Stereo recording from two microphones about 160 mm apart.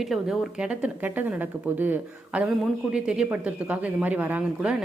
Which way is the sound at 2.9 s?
5° right (ahead or behind).